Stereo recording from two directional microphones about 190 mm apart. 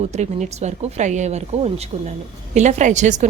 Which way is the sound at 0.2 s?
35° right (ahead or behind).